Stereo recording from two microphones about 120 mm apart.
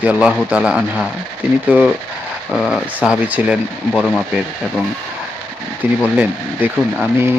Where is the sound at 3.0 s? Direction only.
10° right (ahead or behind).